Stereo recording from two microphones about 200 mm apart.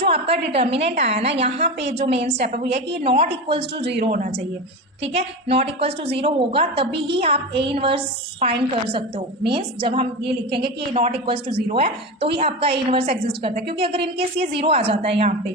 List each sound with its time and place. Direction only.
0.0 s a woman's voice: 30° right (ahead or behind)
4.0 s a woman's voice: 40° right (ahead or behind)
5.0 s a woman's voice: 30° right (ahead or behind)